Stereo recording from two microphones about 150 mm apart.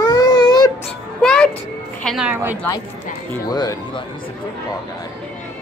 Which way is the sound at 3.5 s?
25° left (ahead or behind).